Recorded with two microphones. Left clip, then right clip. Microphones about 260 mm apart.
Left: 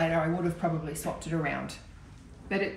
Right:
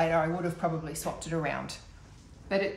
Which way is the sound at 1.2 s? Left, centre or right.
Right.